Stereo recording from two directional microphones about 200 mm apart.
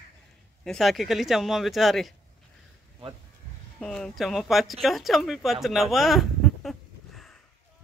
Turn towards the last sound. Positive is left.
turn(degrees=0)  # may be behind; listen again after turning